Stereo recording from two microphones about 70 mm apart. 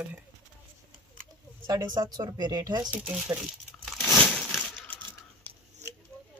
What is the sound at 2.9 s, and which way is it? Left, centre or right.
Speech, right.